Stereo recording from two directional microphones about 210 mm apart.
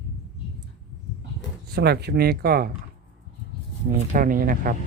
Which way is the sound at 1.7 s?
50° right (ahead or behind).